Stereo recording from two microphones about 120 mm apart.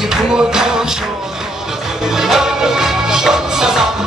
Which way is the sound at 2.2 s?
5° right (ahead or behind).